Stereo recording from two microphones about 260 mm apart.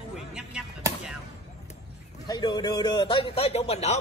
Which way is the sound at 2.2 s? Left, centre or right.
Centre.